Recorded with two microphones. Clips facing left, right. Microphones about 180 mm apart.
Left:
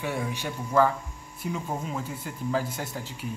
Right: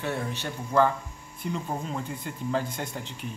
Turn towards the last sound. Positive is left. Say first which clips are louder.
# even
turn(degrees=5)  # may be behind; listen again after turning